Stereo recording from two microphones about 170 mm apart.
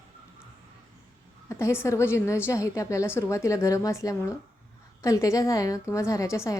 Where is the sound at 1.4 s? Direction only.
15° left (ahead or behind).